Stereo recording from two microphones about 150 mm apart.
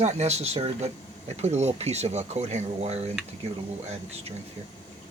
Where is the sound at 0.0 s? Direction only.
45° right (ahead or behind).